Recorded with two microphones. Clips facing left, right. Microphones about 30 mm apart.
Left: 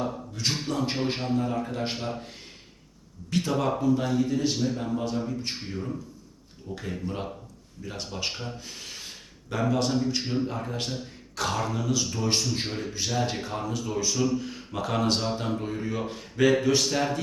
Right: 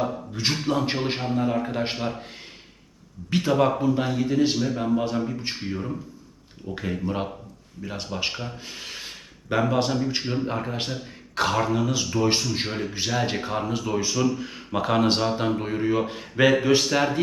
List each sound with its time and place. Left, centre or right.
0.0 s speech: right
3.2 s speech: right
7.9 s speech: centre; by 17.2 s right